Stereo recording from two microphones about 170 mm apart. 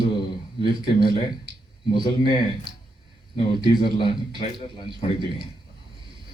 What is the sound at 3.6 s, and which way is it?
A man's voice, 25° left (ahead or behind).